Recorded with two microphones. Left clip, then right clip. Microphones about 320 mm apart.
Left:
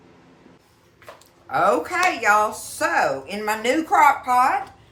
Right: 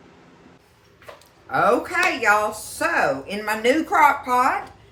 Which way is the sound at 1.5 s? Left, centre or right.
Centre.